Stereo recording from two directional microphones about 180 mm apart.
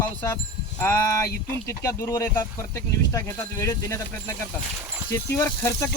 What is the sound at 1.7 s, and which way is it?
Speech, 15° left (ahead or behind).